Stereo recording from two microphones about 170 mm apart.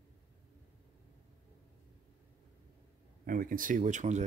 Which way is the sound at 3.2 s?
55° right (ahead or behind).